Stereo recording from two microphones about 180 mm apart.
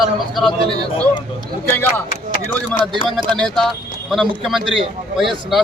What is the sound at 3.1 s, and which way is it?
Speech, centre (ahead or behind).